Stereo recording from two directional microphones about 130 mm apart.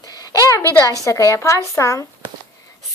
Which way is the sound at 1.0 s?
20° left (ahead or behind).